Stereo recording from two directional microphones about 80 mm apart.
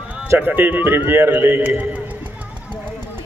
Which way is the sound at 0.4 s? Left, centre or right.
Right.